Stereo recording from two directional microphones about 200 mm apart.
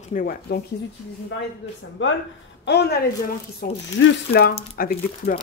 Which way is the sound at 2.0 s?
70° left (ahead or behind).